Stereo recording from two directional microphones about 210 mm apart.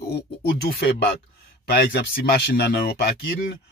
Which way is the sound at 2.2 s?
50° left (ahead or behind).